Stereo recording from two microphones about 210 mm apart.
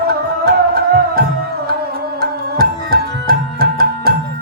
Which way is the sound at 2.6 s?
45° right (ahead or behind).